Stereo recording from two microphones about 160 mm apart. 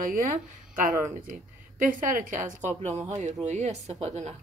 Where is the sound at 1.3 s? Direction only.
55° right (ahead or behind).